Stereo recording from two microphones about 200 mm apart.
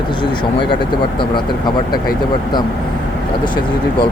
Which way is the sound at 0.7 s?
25° left (ahead or behind).